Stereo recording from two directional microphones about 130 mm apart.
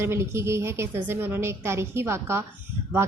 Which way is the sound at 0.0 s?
20° right (ahead or behind).